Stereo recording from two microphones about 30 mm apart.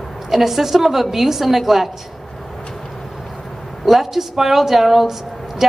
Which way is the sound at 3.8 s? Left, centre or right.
Centre.